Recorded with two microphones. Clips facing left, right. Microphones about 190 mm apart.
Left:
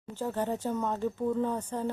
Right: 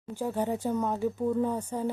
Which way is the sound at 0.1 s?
10° right (ahead or behind).